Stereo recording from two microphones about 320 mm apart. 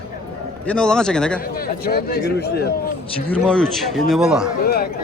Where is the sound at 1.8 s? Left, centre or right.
Left.